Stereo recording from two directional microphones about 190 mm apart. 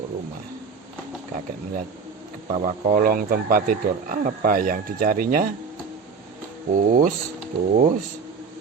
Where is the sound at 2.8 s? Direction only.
45° right (ahead or behind).